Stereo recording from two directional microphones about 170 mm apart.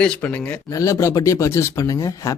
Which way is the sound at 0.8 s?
20° left (ahead or behind).